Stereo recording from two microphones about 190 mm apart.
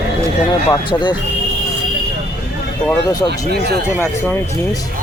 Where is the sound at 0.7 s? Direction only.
25° left (ahead or behind).